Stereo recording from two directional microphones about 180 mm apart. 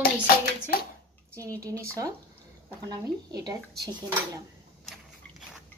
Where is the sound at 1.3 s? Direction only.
15° right (ahead or behind).